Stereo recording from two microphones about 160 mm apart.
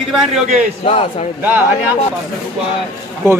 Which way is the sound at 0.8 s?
40° left (ahead or behind).